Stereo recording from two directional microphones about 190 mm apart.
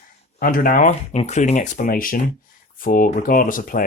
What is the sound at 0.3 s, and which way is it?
Speech, 45° left (ahead or behind).